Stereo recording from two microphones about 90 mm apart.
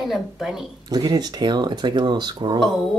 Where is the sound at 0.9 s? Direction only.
50° right (ahead or behind).